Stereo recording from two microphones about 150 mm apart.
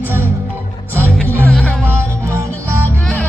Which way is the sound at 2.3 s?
20° right (ahead or behind).